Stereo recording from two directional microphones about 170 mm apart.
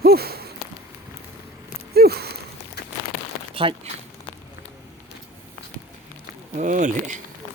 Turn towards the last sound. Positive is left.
turn(degrees=-45)  # may be behind; listen again after turning